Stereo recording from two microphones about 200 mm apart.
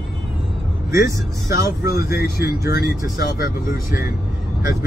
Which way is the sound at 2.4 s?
50° left (ahead or behind).